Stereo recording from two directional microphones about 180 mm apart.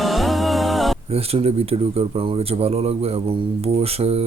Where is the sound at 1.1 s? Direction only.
35° right (ahead or behind).